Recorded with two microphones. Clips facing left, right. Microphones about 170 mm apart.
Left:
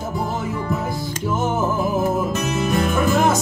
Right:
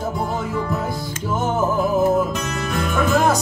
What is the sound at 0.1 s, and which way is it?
Music, centre (ahead or behind).